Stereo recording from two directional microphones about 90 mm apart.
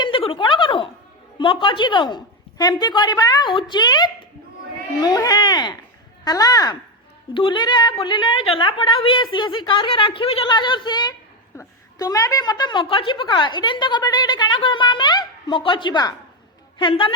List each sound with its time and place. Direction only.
0.0 s a sound: 75° left (ahead or behind)
1.4 s a woman's voice: 65° left (ahead or behind); by 3.5 s 45° left (ahead or behind)
3.5 s a woman's voice: 60° left (ahead or behind); by 6.7 s 45° left (ahead or behind)
7.3 s a woman's voice: 65° left (ahead or behind)
11.9 s a woman's voice: 45° left (ahead or behind); by 17.2 s 65° left (ahead or behind)